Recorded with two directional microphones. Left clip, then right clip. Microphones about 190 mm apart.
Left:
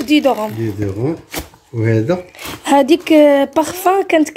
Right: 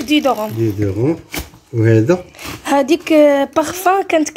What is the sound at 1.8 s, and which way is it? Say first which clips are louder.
Speech: right 3 dB; 30° right (ahead or behind).